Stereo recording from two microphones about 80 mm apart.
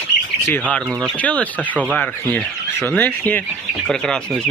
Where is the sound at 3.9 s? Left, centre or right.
Centre.